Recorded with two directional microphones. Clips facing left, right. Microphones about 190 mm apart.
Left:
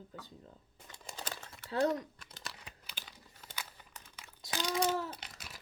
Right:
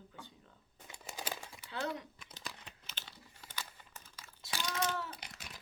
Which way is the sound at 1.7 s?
40° left (ahead or behind).